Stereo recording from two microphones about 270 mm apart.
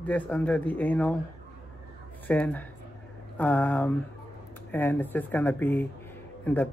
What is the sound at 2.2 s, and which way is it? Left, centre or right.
Speech, centre.